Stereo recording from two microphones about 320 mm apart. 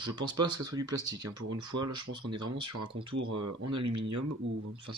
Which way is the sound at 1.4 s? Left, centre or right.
Right.